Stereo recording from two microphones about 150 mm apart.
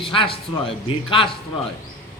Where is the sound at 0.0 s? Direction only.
35° left (ahead or behind).